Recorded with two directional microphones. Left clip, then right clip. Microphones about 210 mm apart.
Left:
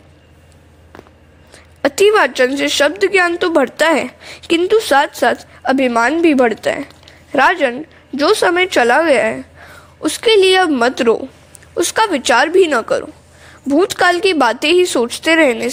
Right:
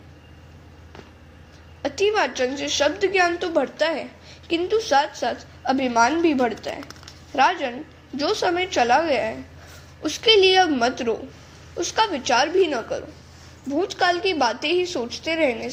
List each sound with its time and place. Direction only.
1.8 s a woman's voice: 45° left (ahead or behind)